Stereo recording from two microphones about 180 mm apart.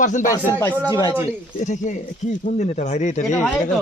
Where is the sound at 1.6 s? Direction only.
45° left (ahead or behind).